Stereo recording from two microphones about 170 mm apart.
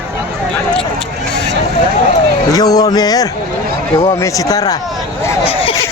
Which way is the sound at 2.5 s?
20° left (ahead or behind).